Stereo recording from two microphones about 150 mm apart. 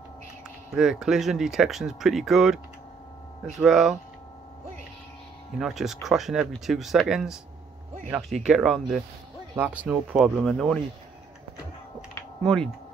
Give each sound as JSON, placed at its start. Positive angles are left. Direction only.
{"t": 0.7, "sound": "speech", "side_deg": -5}
{"t": 5.6, "sound": "speech", "side_deg": 0}
{"t": 8.5, "sound": "speech", "side_deg": 0}